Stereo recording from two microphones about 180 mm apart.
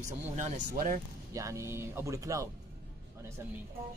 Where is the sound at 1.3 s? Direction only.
15° right (ahead or behind).